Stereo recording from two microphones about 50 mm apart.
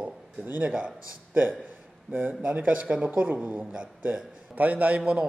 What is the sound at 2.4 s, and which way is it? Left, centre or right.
Speech, right.